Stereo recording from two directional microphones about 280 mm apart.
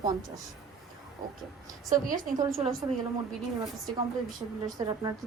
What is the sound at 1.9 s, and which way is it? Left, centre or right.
Speech, right.